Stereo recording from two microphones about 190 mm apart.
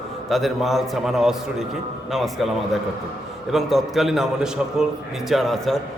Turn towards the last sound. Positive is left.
turn(degrees=0)  # may be behind; listen again after turning